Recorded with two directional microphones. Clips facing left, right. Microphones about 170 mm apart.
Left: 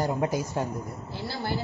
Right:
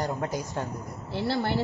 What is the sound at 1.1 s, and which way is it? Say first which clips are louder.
Speech: right 8 dB; 65° right (ahead or behind).